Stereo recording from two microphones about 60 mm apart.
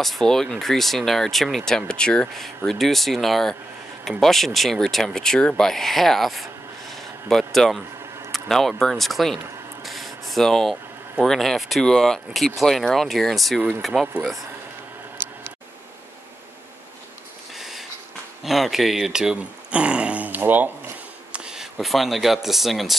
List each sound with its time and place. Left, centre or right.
0.0 s speech: centre
9.8 s a sound: centre
11.2 s speech: centre
13.6 s speech: right
17.6 s a sound: centre
18.4 s speech: centre
19.3 s speech: centre
21.3 s a sound: centre
21.7 s speech: centre